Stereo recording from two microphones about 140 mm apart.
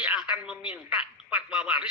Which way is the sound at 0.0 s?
10° right (ahead or behind).